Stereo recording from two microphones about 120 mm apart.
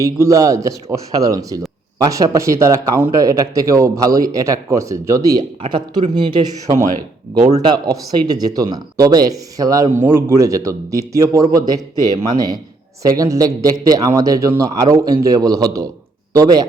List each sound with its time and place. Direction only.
0.0 s speech: 30° right (ahead or behind)
8.3 s a man's voice: 30° right (ahead or behind)